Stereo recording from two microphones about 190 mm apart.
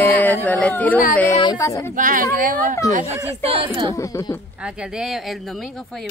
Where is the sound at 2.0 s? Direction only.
45° right (ahead or behind).